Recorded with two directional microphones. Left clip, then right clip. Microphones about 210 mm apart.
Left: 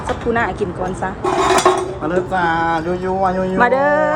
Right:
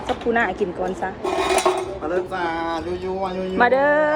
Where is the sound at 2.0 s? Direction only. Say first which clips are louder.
Left 7 dB; 35° left (ahead or behind).